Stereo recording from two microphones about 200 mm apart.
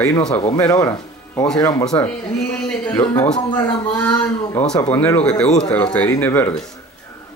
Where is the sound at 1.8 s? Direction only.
5° left (ahead or behind).